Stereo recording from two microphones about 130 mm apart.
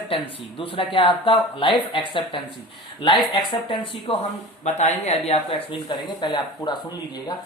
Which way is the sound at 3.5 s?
45° left (ahead or behind).